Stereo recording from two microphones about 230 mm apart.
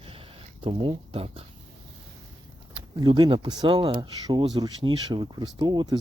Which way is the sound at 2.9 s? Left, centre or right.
Centre.